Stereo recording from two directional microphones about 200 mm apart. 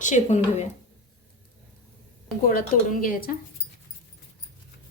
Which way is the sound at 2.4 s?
45° left (ahead or behind).